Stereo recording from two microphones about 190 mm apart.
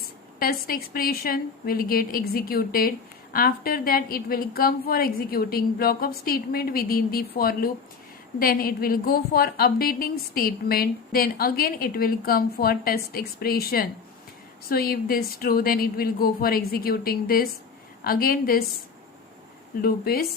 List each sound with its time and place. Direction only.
0.3 s a woman's voice: 50° left (ahead or behind)
19.8 s a woman's voice: 55° left (ahead or behind)